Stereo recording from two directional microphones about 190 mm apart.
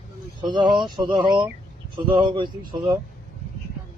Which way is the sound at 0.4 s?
25° right (ahead or behind).